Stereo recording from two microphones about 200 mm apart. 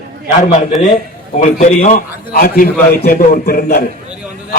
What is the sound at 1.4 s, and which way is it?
A man's voice, 40° left (ahead or behind).